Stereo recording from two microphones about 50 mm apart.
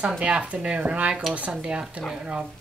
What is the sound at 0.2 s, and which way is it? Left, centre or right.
Speech, right.